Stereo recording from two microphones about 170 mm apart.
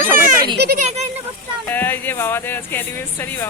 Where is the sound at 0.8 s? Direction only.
40° right (ahead or behind).